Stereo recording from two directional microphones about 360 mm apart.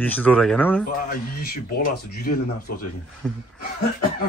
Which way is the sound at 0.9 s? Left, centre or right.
Left.